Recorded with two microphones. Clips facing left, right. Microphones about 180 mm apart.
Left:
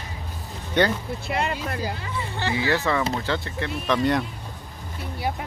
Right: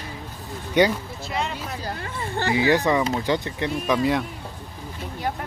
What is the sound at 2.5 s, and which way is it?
Speech, 15° right (ahead or behind).